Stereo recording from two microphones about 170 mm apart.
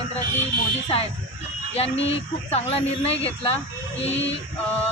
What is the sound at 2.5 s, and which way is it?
Speech, 35° left (ahead or behind).